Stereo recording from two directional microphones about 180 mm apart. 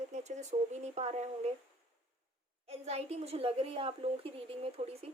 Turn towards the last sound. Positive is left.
turn(degrees=-30)  # may be behind; listen again after turning